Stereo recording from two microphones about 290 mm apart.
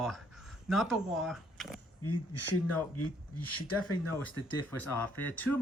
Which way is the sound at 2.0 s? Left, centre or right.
Left.